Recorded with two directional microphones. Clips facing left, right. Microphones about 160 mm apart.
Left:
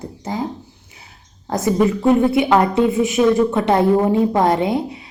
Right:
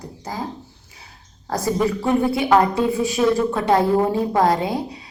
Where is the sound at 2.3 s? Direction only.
20° left (ahead or behind).